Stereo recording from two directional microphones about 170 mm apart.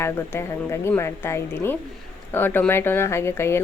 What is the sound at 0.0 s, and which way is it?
Speech, 15° left (ahead or behind).